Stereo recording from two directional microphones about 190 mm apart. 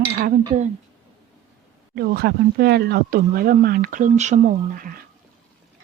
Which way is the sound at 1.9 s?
55° right (ahead or behind).